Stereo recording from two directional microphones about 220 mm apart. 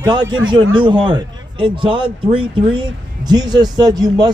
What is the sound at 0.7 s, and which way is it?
Speech, 20° right (ahead or behind).